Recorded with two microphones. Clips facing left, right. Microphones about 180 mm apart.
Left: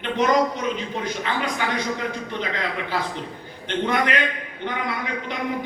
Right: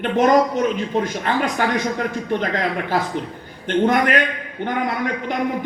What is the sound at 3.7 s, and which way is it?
A man's voice, 50° right (ahead or behind).